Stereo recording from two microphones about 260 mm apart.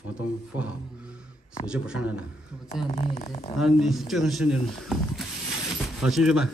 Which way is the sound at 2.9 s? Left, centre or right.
Left.